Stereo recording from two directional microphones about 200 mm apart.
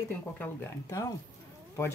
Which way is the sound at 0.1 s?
10° left (ahead or behind).